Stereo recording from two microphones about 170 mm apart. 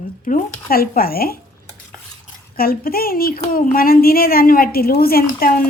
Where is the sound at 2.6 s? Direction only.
60° left (ahead or behind).